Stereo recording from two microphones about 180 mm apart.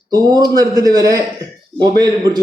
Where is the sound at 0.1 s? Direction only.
20° right (ahead or behind).